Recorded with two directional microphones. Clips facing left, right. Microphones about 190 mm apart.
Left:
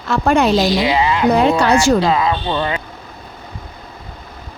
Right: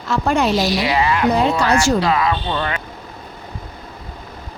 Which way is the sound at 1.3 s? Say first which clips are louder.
Left 3 dB; 60° left (ahead or behind).